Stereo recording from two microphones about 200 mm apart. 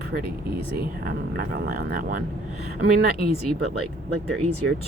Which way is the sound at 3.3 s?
30° left (ahead or behind).